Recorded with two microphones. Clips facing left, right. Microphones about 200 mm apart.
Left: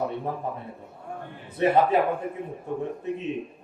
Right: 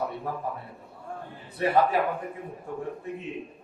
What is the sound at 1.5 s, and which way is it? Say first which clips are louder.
Speech: left 3 dB; 20° left (ahead or behind).